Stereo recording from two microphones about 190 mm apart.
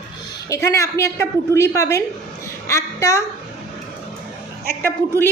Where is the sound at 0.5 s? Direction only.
15° left (ahead or behind).